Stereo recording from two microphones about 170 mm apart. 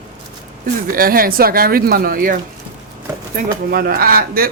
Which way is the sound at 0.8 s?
60° right (ahead or behind).